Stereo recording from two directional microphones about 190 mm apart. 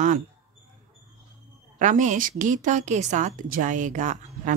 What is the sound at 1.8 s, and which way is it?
A woman's voice, 40° right (ahead or behind).